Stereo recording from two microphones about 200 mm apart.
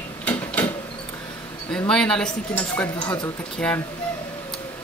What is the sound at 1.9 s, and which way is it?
Speech, 5° left (ahead or behind).